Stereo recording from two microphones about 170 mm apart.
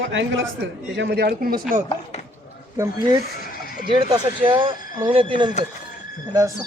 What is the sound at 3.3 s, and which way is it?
Sheep, 55° left (ahead or behind).